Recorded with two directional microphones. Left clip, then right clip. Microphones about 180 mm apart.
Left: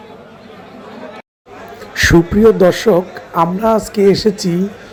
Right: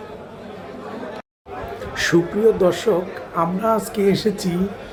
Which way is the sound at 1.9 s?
35° left (ahead or behind).